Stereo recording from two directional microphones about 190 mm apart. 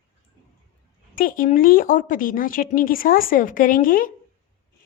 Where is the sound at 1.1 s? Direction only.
45° left (ahead or behind).